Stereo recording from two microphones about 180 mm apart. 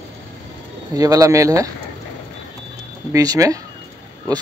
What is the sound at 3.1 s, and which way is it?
Speech, 20° right (ahead or behind).